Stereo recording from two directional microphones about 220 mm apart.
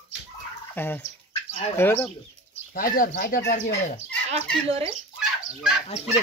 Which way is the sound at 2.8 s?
40° left (ahead or behind).